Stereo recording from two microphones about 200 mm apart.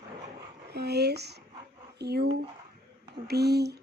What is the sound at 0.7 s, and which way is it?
A woman's voice, 55° right (ahead or behind).